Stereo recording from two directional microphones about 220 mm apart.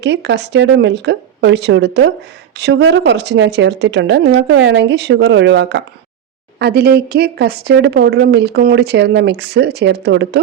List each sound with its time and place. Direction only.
0.0 s speech: 50° right (ahead or behind)